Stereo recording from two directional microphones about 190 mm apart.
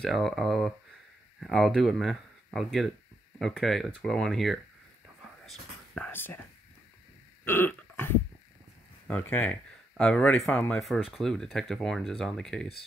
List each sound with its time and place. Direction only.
0.0 s speech: centre (ahead or behind)
5.2 s whispering: 5° left (ahead or behind)
7.4 s burping: 10° left (ahead or behind)
9.0 s speech: 10° left (ahead or behind)